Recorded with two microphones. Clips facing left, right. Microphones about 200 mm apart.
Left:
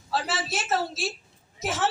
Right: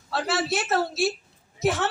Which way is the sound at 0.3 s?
60° right (ahead or behind).